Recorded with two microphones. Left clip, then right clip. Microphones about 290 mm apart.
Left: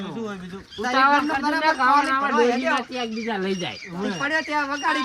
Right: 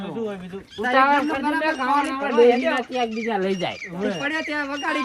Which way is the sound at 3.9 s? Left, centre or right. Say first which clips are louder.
Left 3 dB; centre.